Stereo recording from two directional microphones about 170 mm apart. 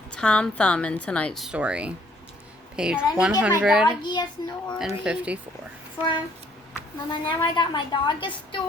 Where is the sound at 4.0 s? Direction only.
25° left (ahead or behind).